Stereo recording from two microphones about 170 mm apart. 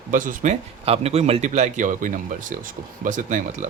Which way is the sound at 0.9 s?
35° right (ahead or behind).